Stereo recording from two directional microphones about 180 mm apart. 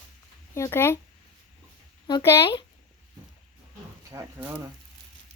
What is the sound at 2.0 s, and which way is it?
Speech, 20° left (ahead or behind).